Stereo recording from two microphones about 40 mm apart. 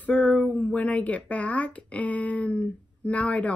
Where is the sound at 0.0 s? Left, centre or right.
Left.